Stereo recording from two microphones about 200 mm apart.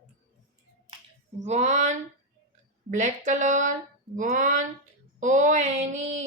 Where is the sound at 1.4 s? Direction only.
35° right (ahead or behind).